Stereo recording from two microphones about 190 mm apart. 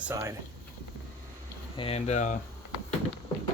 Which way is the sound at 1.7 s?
30° left (ahead or behind).